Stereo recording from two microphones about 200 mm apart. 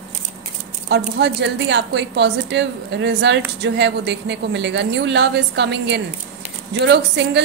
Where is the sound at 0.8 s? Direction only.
60° right (ahead or behind).